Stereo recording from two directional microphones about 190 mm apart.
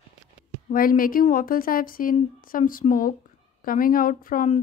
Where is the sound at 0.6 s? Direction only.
50° left (ahead or behind).